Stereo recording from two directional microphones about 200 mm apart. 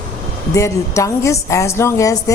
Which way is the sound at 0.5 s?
15° left (ahead or behind).